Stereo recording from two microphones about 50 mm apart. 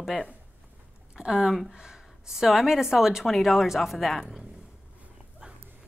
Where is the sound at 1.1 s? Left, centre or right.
Centre.